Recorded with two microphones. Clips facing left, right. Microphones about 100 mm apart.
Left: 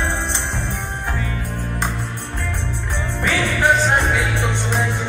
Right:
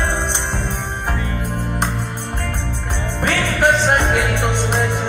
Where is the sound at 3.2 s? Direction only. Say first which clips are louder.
Right 1 dB; 70° right (ahead or behind).